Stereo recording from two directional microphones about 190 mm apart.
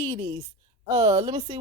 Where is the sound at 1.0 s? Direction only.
20° right (ahead or behind).